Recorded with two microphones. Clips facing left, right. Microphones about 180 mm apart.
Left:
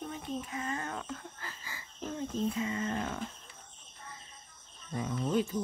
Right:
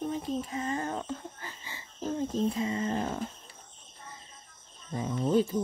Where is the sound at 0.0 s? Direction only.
35° right (ahead or behind).